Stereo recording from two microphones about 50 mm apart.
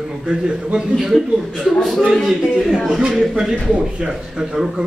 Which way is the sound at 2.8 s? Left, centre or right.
Centre.